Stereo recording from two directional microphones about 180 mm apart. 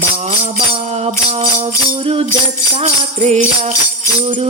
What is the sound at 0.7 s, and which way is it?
Music, 35° right (ahead or behind).